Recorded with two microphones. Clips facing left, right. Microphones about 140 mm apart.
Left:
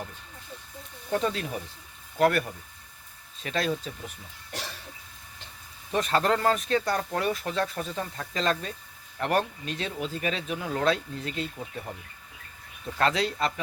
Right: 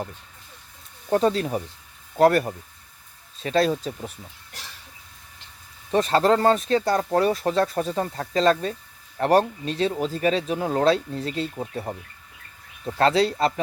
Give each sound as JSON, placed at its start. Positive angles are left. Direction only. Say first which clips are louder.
{"t": 1.1, "sound": "speech", "louder": "right 7 dB", "side_deg": -35}
{"t": 5.9, "sound": "speech", "louder": "right 6 dB", "side_deg": -35}